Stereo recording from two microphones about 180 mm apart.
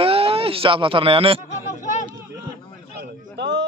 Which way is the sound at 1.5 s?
40° left (ahead or behind).